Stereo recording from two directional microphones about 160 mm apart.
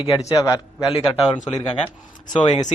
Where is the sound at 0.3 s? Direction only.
20° left (ahead or behind).